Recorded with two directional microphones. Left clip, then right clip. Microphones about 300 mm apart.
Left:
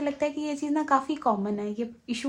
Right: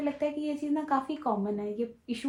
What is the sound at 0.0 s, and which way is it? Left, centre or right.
Speech, left.